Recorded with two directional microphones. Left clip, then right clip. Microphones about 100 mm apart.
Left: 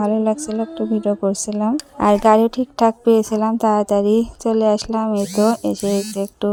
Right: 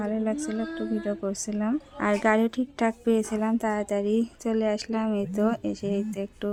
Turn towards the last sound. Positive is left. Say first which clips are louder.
# left 9 dB
turn(degrees=45)  # may be behind; listen again after turning